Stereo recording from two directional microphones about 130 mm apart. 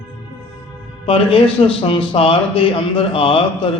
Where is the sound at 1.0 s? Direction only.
45° left (ahead or behind).